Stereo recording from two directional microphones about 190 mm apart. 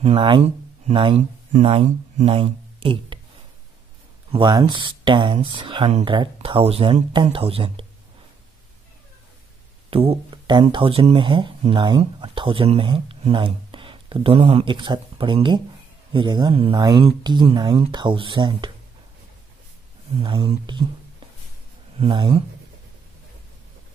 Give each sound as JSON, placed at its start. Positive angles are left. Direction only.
{"t": 0.0, "sound": "speech", "side_deg": -30}
{"t": 4.3, "sound": "speech", "side_deg": -25}
{"t": 9.8, "sound": "speech", "side_deg": -30}
{"t": 20.2, "sound": "speech", "side_deg": -25}
{"t": 21.9, "sound": "speech", "side_deg": -25}